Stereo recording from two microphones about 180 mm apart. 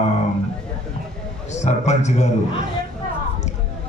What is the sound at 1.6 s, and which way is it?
Speech, 40° left (ahead or behind).